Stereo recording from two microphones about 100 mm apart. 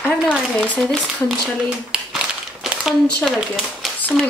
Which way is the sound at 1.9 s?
5° right (ahead or behind).